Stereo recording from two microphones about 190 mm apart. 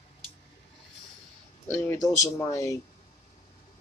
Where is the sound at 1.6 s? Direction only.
10° left (ahead or behind).